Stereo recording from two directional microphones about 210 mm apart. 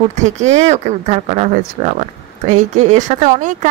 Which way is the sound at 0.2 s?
35° right (ahead or behind).